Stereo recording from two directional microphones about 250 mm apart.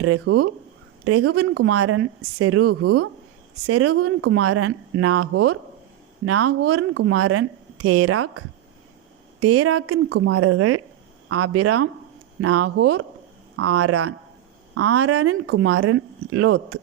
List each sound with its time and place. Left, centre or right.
0.0 s speech: right
10.1 s speech: right